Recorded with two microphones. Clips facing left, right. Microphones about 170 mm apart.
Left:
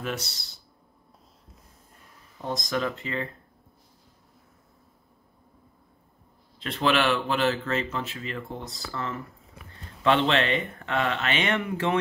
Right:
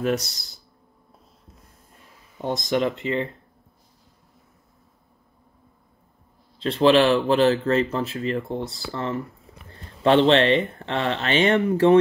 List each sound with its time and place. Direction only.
0.0 s speech: 40° right (ahead or behind)
2.4 s speech: 25° right (ahead or behind)
6.6 s speech: 30° right (ahead or behind)